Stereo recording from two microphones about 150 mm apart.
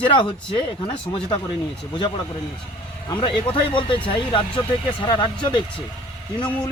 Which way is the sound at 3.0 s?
30° left (ahead or behind).